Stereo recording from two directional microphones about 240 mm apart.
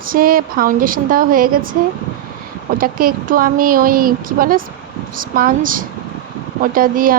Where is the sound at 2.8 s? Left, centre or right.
Right.